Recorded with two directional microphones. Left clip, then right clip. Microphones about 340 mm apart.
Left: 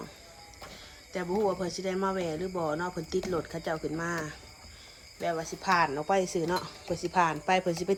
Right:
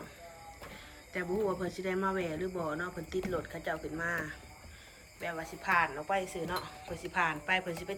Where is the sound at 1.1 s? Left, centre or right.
Centre.